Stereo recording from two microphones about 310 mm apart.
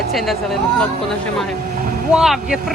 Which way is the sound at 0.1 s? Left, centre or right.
Centre.